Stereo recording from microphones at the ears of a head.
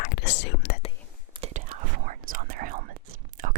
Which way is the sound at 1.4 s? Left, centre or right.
Right.